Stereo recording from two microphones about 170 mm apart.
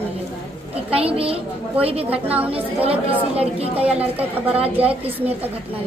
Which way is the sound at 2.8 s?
35° right (ahead or behind).